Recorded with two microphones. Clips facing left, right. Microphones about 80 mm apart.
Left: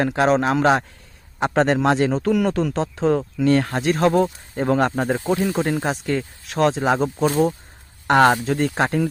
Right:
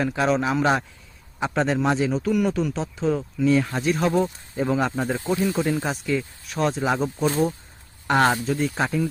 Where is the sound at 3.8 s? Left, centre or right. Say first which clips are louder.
Left 4 dB; left.